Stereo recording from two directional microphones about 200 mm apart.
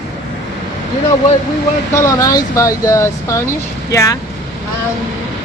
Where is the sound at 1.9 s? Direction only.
15° left (ahead or behind).